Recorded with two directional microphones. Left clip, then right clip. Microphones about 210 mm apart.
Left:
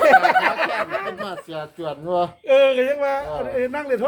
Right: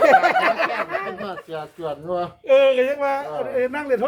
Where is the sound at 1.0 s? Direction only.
55° left (ahead or behind).